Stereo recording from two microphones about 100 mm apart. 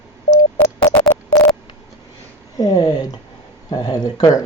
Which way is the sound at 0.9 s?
30° left (ahead or behind).